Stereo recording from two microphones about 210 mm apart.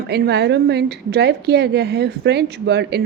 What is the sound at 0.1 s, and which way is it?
Speech, 50° right (ahead or behind).